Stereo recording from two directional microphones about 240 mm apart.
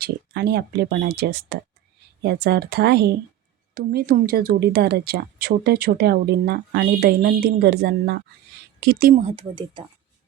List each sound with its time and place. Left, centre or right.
0.0 s speech: right